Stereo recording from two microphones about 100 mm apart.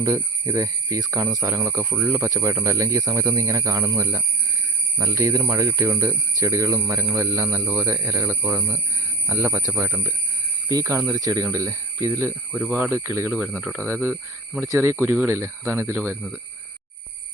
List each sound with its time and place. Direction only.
0.0 s speech: 35° right (ahead or behind)
10.7 s speech: 35° right (ahead or behind)
12.6 s speech: 20° right (ahead or behind)